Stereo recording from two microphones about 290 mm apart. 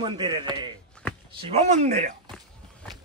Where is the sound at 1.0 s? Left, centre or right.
Centre.